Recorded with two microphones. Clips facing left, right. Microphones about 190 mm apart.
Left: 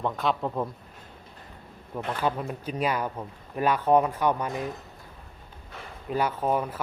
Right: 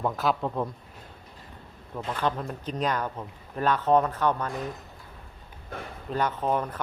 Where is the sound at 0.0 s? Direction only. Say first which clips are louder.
Right 1 dB; centre (ahead or behind).